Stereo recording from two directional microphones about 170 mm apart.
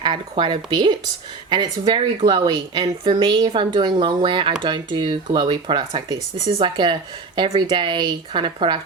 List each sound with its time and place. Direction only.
0.0 s speech: 30° right (ahead or behind)